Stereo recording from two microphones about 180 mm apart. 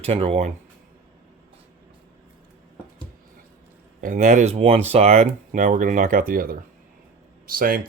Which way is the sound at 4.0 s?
45° right (ahead or behind).